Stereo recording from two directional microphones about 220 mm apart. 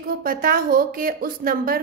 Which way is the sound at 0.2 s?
40° right (ahead or behind).